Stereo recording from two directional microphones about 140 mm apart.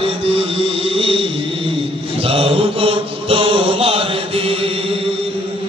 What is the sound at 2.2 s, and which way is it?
Mantra, 45° right (ahead or behind).